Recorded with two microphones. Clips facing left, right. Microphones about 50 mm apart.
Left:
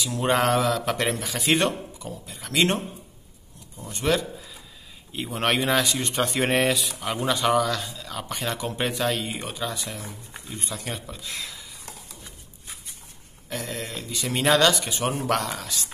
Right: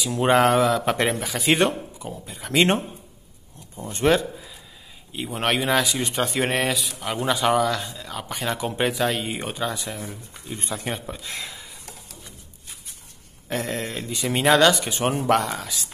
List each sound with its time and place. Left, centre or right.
0.1 s a man's voice: centre
1.3 s speech: centre
2.0 s speech: right
5.1 s speech: centre
8.5 s a man's voice: centre
9.2 s speech: right
13.5 s speech: right
14.4 s a man's voice: centre
14.9 s speech: right
15.6 s speech: centre